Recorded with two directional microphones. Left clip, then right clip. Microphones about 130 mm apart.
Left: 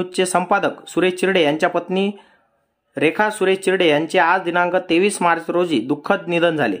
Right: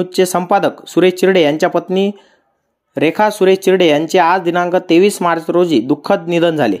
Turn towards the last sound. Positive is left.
turn(degrees=-30)  # may be behind; listen again after turning